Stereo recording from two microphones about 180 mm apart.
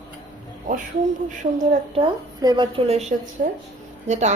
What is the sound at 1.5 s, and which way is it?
A woman's voice, 35° right (ahead or behind).